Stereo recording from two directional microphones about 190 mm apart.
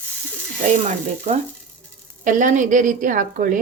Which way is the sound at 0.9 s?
35° right (ahead or behind).